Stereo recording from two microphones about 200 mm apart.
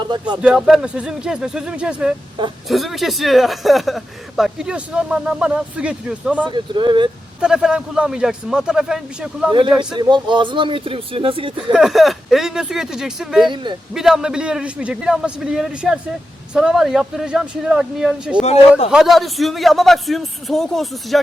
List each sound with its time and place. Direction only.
0.0 s speech: 20° right (ahead or behind)
0.4 s speech: 5° right (ahead or behind)
6.5 s speech: 25° right (ahead or behind)
7.4 s speech: 5° right (ahead or behind)
9.5 s speech: 20° right (ahead or behind)
11.7 s speech: centre (ahead or behind)
13.5 s speech: 25° right (ahead or behind)
13.9 s speech: centre (ahead or behind)